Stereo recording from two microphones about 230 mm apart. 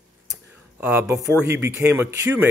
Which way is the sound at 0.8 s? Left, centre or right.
Centre.